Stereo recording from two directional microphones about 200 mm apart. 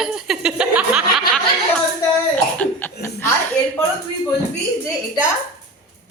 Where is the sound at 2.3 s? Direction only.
10° left (ahead or behind).